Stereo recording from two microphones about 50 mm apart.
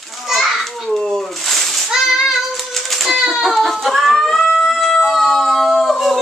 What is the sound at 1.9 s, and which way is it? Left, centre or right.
Child singing, centre.